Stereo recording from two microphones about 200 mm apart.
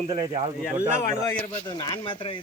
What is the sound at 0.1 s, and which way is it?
Speech, 25° right (ahead or behind).